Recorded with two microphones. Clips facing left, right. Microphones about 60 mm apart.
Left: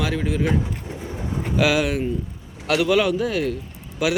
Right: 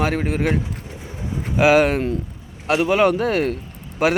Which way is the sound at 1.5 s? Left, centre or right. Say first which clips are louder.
Right 5 dB; right.